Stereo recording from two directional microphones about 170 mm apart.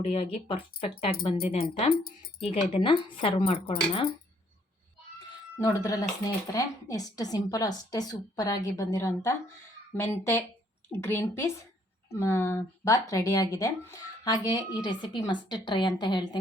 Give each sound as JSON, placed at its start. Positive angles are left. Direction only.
{"t": 0.0, "sound": "speech", "side_deg": 35}
{"t": 2.4, "sound": "speech", "side_deg": 45}
{"t": 2.7, "sound": "speech", "side_deg": 30}
{"t": 5.5, "sound": "a woman's voice", "side_deg": 20}